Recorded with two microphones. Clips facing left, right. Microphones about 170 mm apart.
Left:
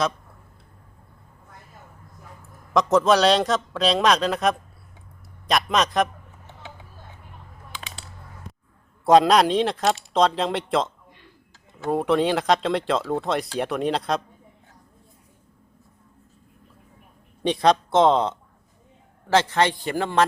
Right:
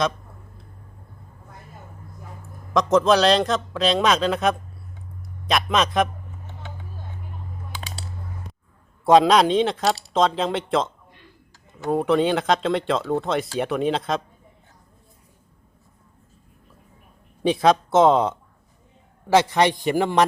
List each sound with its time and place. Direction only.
2.7 s speech: centre (ahead or behind)
7.8 s a sound: 35° right (ahead or behind)
9.0 s speech: centre (ahead or behind)
17.4 s a man's voice: 5° right (ahead or behind)